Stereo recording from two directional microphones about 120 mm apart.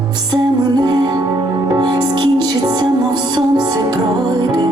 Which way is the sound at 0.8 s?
35° right (ahead or behind).